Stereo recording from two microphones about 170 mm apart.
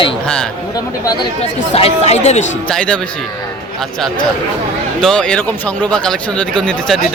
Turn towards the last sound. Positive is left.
turn(degrees=5)  # may be behind; listen again after turning